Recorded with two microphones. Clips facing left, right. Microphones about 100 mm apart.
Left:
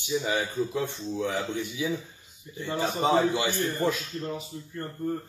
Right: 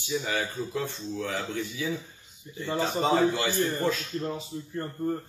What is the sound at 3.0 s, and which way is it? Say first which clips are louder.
A man's voice: left 1 dB; 15° left (ahead or behind).